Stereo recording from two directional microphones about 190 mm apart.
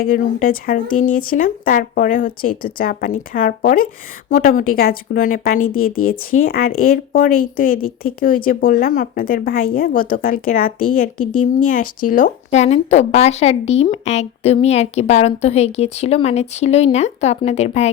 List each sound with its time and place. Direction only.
0.0 s a woman's voice: 45° left (ahead or behind)
5.5 s speech: 90° left
6.1 s a woman's voice: 50° left (ahead or behind)